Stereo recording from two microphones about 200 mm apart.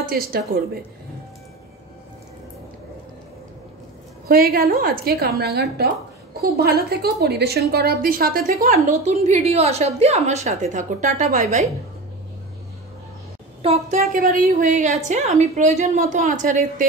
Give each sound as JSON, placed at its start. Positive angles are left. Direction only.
{"t": 4.3, "sound": "a woman's voice", "side_deg": -50}
{"t": 13.6, "sound": "a woman's voice", "side_deg": -30}
{"t": 14.1, "sound": "a woman's voice", "side_deg": -45}